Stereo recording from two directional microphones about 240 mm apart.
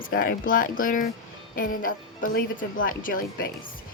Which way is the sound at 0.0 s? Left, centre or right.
Left.